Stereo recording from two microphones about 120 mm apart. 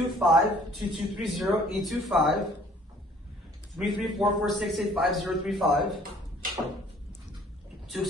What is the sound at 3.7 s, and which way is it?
A man's voice, centre (ahead or behind).